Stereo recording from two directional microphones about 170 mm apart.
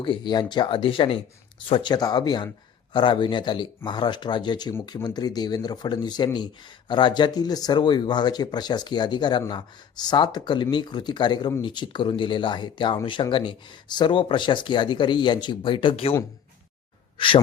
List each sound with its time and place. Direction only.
0.0 s speech: 30° left (ahead or behind)
17.2 s speech: 30° left (ahead or behind)